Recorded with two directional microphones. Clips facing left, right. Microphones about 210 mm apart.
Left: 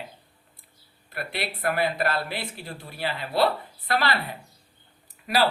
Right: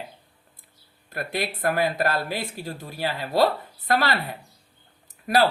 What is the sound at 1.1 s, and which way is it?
A woman's voice, 45° right (ahead or behind).